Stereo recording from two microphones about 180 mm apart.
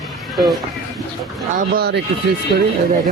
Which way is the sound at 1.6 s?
60° right (ahead or behind).